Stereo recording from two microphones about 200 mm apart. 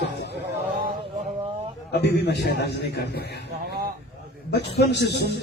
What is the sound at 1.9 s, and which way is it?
Speech, 55° left (ahead or behind).